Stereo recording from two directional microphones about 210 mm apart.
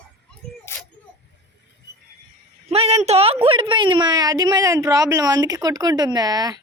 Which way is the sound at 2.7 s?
30° right (ahead or behind).